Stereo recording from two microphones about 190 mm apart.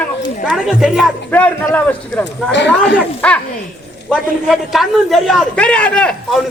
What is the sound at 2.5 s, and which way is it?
Speech, 65° left (ahead or behind).